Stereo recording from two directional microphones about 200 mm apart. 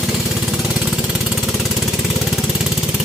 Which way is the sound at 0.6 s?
5° right (ahead or behind).